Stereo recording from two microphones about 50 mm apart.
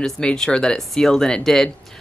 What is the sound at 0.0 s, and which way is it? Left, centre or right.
Speech, centre.